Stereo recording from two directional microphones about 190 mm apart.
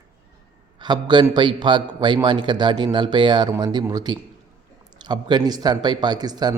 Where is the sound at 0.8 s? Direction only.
25° right (ahead or behind).